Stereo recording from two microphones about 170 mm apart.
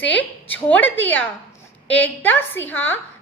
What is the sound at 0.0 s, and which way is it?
A woman's voice, 10° left (ahead or behind).